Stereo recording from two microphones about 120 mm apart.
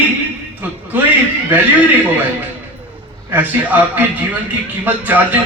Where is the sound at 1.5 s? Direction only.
15° right (ahead or behind).